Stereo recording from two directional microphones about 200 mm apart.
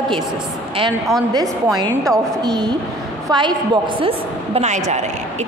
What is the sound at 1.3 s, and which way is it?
A woman's voice, 20° right (ahead or behind).